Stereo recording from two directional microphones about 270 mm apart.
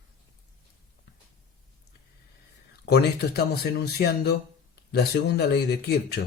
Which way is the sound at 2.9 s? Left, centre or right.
Left.